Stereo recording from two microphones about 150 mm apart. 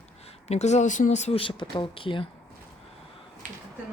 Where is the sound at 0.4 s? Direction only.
45° left (ahead or behind).